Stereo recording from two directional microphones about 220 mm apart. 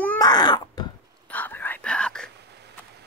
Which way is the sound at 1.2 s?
5° left (ahead or behind).